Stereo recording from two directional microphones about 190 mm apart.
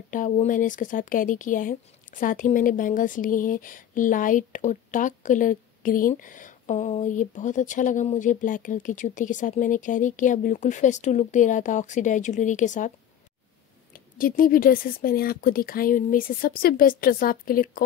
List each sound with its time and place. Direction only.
0.1 s speech: 45° left (ahead or behind)
13.9 s speech: 45° left (ahead or behind)